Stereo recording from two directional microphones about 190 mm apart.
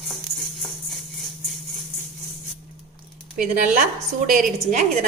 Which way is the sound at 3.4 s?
45° right (ahead or behind).